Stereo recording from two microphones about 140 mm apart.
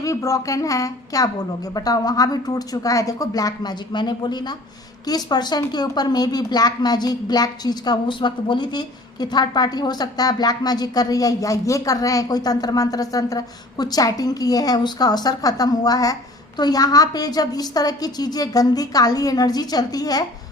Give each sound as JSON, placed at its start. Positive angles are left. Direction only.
{"t": 0.0, "sound": "a woman's voice", "side_deg": 25}